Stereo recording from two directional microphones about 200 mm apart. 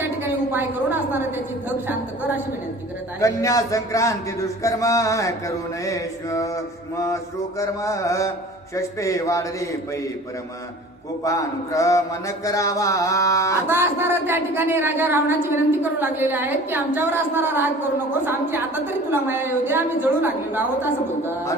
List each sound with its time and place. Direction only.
0.2 s a woman's voice: 10° right (ahead or behind)
3.2 s a man's voice: 15° left (ahead or behind)
11.2 s a man's voice: 15° left (ahead or behind)
13.7 s a woman's voice: 10° right (ahead or behind)